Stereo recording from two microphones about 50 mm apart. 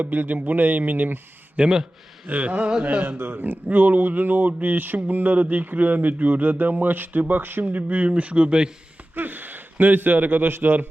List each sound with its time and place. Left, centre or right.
0.0 s speech: right
1.5 s speech: centre
2.2 s speech: right
3.2 s speech: right; by 8.7 s centre
9.1 s speech: right